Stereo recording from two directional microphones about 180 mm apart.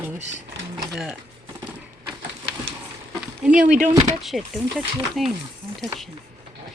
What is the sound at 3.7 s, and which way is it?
Speech, 45° right (ahead or behind).